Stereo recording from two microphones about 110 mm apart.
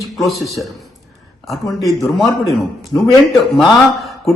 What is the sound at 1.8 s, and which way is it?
Speech, centre (ahead or behind).